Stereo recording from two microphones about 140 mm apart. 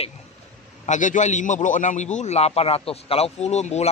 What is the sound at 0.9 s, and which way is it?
A man's voice, 60° left (ahead or behind).